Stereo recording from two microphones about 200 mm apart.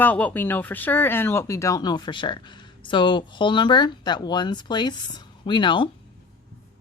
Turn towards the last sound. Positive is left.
turn(degrees=25)  # may be behind; listen again after turning